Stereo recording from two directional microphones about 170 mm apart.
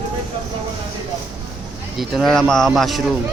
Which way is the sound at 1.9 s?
Centre (ahead or behind).